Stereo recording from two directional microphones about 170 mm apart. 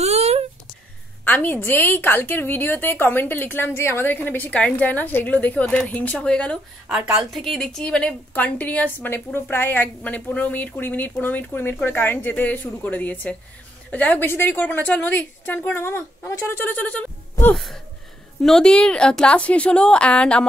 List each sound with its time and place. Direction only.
0.0 s a sound: 40° right (ahead or behind)
1.2 s a woman's voice: 10° left (ahead or behind)
6.9 s a woman's voice: 5° right (ahead or behind)